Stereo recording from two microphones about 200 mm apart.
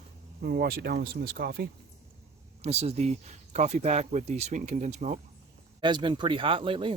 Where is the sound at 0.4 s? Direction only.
50° right (ahead or behind).